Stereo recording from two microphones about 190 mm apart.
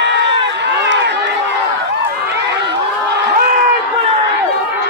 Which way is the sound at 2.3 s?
65° right (ahead or behind).